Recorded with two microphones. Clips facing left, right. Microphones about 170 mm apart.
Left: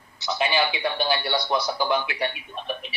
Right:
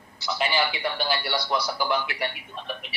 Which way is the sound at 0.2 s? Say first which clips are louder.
Left 2 dB; 20° left (ahead or behind).